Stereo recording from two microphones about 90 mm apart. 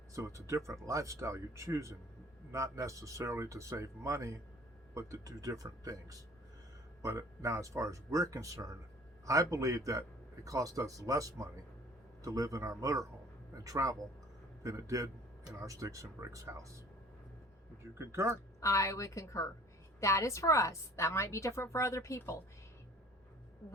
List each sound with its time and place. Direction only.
0.1 s speech: 35° right (ahead or behind)
17.9 s speech: 30° right (ahead or behind)
18.6 s a woman's voice: 35° left (ahead or behind)